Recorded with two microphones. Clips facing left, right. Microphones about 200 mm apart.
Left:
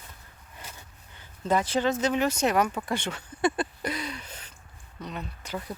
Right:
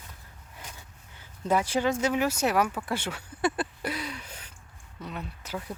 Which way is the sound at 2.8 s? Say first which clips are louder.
Left 1 dB; 5° right (ahead or behind).